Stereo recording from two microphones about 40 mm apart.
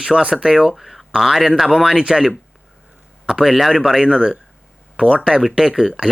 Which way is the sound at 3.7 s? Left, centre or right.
Centre.